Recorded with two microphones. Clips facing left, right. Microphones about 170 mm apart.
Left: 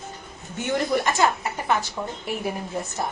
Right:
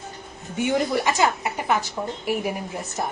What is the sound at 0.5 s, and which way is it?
A woman's voice, 15° right (ahead or behind).